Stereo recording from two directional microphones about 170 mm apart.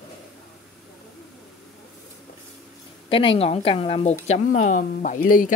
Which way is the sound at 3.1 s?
30° left (ahead or behind).